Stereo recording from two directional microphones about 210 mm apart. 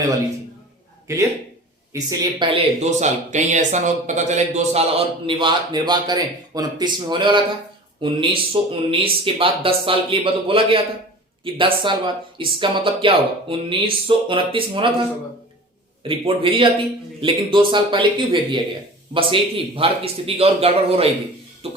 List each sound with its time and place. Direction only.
1.1 s speech: 15° right (ahead or behind)
2.8 s a man's voice: 35° right (ahead or behind)
16.0 s a man's voice: 25° right (ahead or behind)